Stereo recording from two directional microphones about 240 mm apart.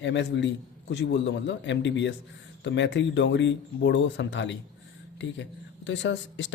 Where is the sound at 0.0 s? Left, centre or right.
Left.